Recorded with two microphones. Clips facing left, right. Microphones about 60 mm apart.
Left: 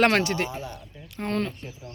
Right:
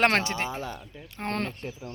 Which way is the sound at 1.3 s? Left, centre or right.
Right.